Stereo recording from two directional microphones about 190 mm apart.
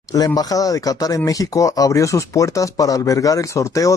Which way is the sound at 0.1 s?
20° left (ahead or behind).